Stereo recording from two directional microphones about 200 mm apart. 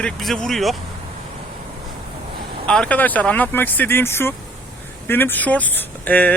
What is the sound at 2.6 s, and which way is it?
Speech, 5° left (ahead or behind).